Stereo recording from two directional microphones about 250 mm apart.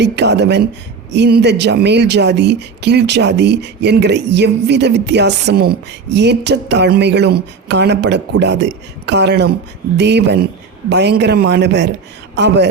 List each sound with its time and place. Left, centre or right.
0.0 s a man's voice: right